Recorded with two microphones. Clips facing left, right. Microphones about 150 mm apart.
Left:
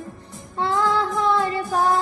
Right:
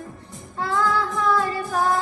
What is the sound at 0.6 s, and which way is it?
Child singing, 25° left (ahead or behind).